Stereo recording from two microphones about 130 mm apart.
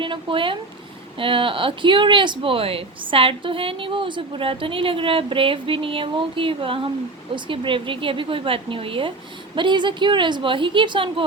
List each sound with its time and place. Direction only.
0.0 s a woman's voice: 40° right (ahead or behind)